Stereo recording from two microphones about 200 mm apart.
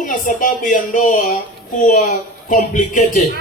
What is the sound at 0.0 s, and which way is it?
Speech, 40° left (ahead or behind).